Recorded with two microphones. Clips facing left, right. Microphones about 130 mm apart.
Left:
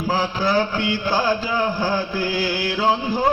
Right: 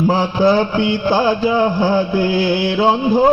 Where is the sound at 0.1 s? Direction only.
20° right (ahead or behind).